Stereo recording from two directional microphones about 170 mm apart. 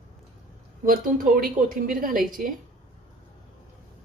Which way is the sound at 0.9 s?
55° right (ahead or behind).